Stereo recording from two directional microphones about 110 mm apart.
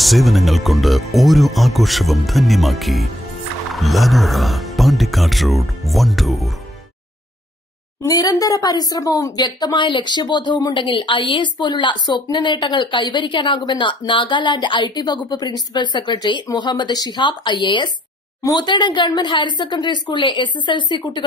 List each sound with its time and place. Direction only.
0.0 s speech: centre (ahead or behind)
8.0 s a woman's voice: 35° left (ahead or behind)